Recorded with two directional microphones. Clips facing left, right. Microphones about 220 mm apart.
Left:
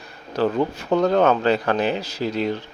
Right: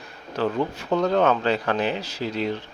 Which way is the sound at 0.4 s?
35° left (ahead or behind).